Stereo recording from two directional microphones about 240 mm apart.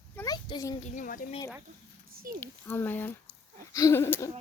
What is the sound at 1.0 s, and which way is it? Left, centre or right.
Speech, left.